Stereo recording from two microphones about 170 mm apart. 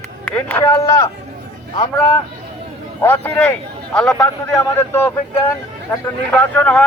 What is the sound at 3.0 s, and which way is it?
Speech, 10° left (ahead or behind).